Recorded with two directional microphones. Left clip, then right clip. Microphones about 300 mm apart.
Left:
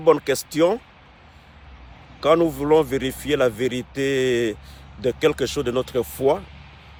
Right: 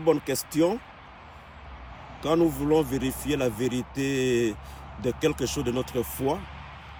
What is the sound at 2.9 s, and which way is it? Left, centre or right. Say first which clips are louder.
Speech: left 6 dB; centre.